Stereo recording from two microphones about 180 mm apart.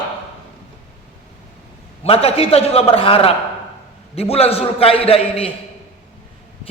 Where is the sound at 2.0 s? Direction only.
30° left (ahead or behind).